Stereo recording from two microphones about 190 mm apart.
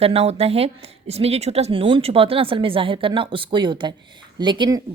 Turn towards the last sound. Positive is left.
turn(degrees=-25)  # may be behind; listen again after turning